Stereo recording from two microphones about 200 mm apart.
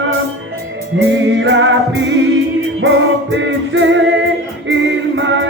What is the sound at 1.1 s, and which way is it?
Music, 65° right (ahead or behind).